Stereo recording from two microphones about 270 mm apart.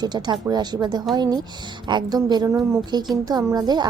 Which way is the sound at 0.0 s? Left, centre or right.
Centre.